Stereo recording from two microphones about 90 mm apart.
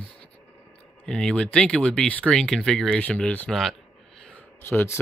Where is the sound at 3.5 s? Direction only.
Centre (ahead or behind).